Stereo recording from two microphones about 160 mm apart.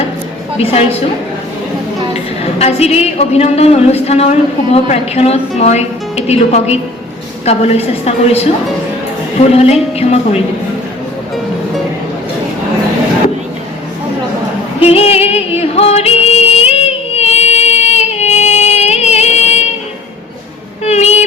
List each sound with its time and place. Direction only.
0.6 s speech: 40° left (ahead or behind)
2.6 s speech: 40° left (ahead or behind)
14.8 s music: 40° left (ahead or behind)
20.8 s a sound: 45° left (ahead or behind)